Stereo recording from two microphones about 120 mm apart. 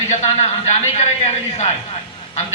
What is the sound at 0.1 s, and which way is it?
Speech, 70° left (ahead or behind).